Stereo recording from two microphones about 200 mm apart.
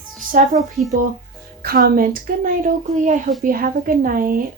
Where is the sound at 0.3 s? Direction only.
40° right (ahead or behind).